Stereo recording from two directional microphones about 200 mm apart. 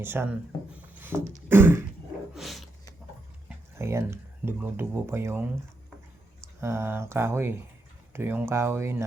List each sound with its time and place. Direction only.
0.0 s speech: 10° right (ahead or behind)
0.8 s dog: 10° right (ahead or behind)
2.3 s a sound: centre (ahead or behind)
3.8 s speech: 15° right (ahead or behind)
6.6 s speech: 15° right (ahead or behind)